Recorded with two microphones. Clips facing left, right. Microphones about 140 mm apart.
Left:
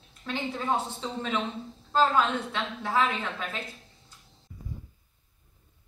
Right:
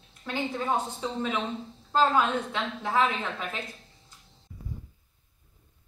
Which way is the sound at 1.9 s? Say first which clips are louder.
Even; 5° right (ahead or behind).